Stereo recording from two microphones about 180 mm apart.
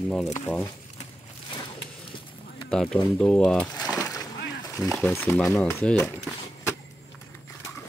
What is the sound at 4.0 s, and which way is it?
Splash, 20° left (ahead or behind).